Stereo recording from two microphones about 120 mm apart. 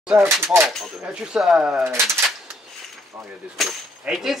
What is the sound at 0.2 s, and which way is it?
Speech, 20° right (ahead or behind).